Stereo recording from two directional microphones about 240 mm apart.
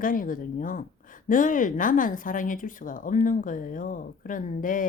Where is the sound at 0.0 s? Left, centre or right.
Left.